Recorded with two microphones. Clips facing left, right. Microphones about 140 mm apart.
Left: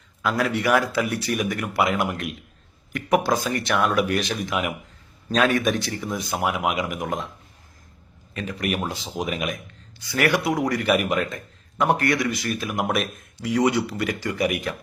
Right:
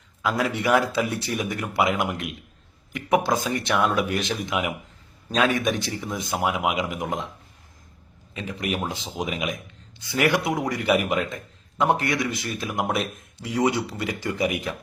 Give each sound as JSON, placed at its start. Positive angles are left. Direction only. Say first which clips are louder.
{"t": 0.2, "sound": "speech", "louder": "left 1 dB", "side_deg": -20}
{"t": 8.4, "sound": "speech", "louder": "left 2 dB", "side_deg": -20}